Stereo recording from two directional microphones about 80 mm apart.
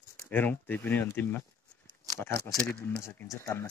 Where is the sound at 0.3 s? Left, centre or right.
Left.